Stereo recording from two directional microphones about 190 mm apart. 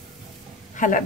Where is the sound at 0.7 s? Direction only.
45° left (ahead or behind).